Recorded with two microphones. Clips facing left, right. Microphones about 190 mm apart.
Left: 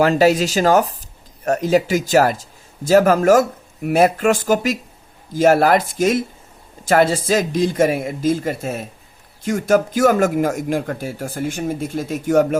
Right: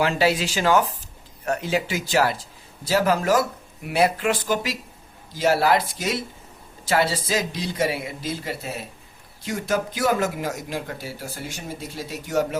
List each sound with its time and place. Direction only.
0.0 s speech: 45° left (ahead or behind)